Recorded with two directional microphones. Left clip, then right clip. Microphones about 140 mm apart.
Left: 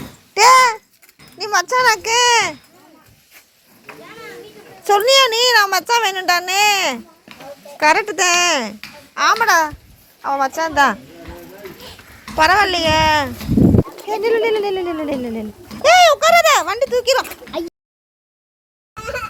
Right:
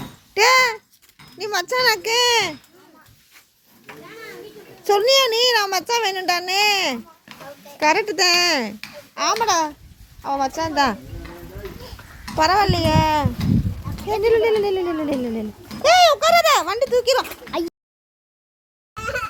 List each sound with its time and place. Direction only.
0.3 s babbling: 20° right (ahead or behind)
1.4 s a child's voice: 25° right (ahead or behind)
4.8 s a child's voice: 20° right (ahead or behind)
12.4 s a child's voice: 5° right (ahead or behind)
14.1 s a child's voice: 20° right (ahead or behind)
17.5 s a sound: 50° right (ahead or behind)